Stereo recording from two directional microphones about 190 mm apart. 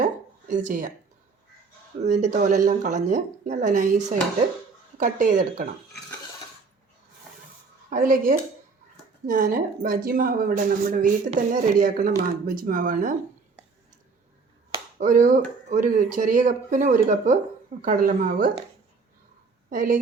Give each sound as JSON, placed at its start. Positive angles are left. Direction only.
{"t": 0.0, "sound": "a sound", "side_deg": -40}
{"t": 2.1, "sound": "a woman's voice", "side_deg": -40}
{"t": 7.9, "sound": "a woman's voice", "side_deg": -45}
{"t": 14.9, "sound": "a woman's voice", "side_deg": -40}
{"t": 19.7, "sound": "a woman's voice", "side_deg": -45}